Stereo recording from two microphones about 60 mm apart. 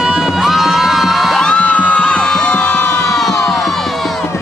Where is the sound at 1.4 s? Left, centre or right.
Centre.